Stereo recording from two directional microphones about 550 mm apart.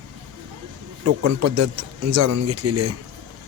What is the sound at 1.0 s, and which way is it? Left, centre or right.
Speech, right.